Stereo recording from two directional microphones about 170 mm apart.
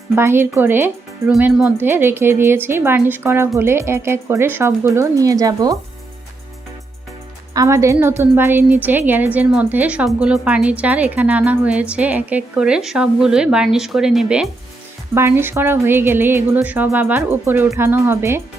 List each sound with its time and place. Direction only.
0.2 s a woman's voice: 15° right (ahead or behind)
7.5 s a woman's voice: 20° right (ahead or behind)
15.1 s a woman's voice: 15° right (ahead or behind)